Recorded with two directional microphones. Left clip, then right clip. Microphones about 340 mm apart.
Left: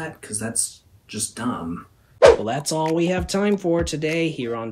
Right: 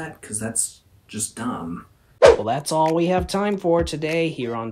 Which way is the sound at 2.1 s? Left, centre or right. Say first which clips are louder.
Even; centre.